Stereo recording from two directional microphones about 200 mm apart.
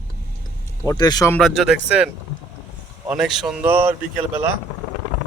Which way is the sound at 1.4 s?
Centre (ahead or behind).